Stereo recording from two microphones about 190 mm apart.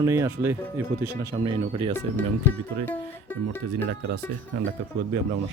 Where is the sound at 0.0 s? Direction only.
15° right (ahead or behind).